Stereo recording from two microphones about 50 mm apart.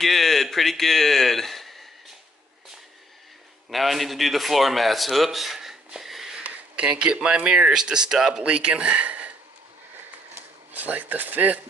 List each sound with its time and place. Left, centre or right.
0.0 s speech: centre
3.7 s speech: centre
5.9 s wheeze: centre
6.4 s a sound: right
7.3 s speech: right
10.7 s speech: right